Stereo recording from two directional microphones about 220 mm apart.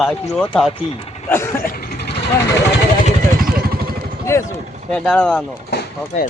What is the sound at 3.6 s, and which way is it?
Vehicle, 45° right (ahead or behind).